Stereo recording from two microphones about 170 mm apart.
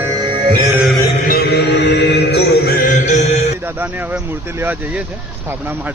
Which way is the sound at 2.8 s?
45° left (ahead or behind).